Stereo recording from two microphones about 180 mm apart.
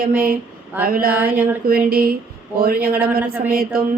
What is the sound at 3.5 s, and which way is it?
Speech, 55° right (ahead or behind).